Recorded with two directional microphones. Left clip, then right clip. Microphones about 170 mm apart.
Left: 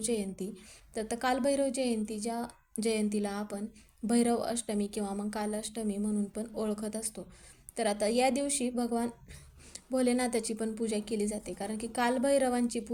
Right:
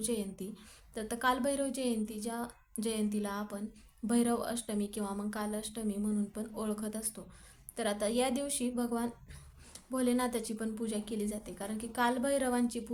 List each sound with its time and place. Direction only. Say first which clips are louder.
0.0 s a woman's voice: left 3 dB; 15° left (ahead or behind)